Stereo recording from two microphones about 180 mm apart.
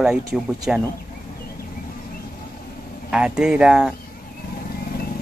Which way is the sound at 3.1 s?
5° right (ahead or behind).